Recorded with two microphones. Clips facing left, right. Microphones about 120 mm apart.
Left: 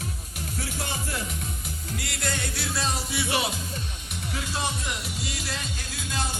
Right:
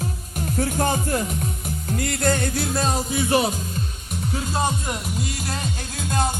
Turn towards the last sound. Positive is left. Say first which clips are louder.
# right 8 dB
turn(degrees=-50)  # may be behind; listen again after turning